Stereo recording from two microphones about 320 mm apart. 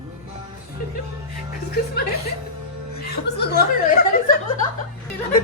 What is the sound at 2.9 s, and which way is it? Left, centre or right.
Speech, left.